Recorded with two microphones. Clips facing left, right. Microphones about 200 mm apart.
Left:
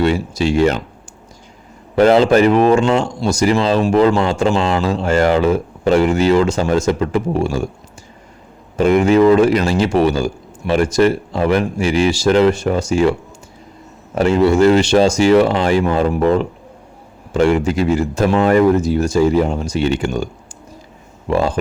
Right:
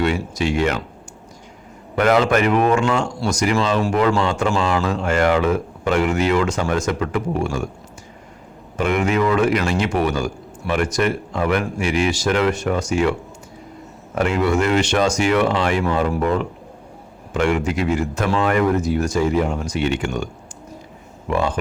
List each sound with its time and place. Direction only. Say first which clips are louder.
0.0 s speech: left 4 dB; 30° left (ahead or behind)
2.0 s speech: left 6 dB; 30° left (ahead or behind)
8.8 s speech: left 8 dB; 30° left (ahead or behind)
14.2 s speech: left 6 dB; 30° left (ahead or behind)
21.2 s speech: left 4 dB; 30° left (ahead or behind)